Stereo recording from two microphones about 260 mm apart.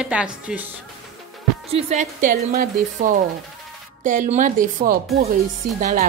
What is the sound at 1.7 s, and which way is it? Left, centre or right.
Speech, right.